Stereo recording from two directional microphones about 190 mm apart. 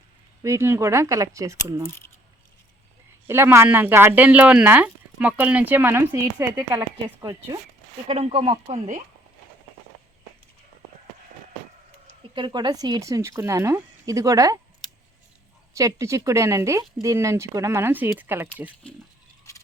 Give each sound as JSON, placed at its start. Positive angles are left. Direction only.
{"t": 0.4, "sound": "speech", "side_deg": -15}
{"t": 3.2, "sound": "speech", "side_deg": -15}
{"t": 8.0, "sound": "speech", "side_deg": -30}
{"t": 12.3, "sound": "speech", "side_deg": -25}
{"t": 15.7, "sound": "speech", "side_deg": -15}
{"t": 19.5, "sound": "a sound", "side_deg": 15}